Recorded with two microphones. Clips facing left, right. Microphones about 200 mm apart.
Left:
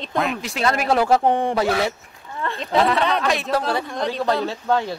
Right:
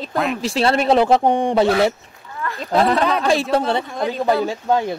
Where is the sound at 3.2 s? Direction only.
30° right (ahead or behind).